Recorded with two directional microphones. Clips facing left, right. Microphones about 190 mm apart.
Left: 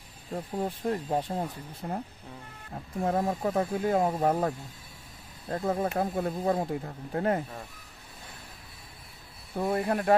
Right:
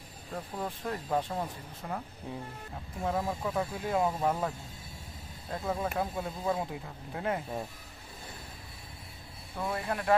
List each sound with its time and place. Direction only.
0.6 s speech: 30° left (ahead or behind)
3.0 s speech: 50° left (ahead or behind)
9.6 s speech: 40° left (ahead or behind)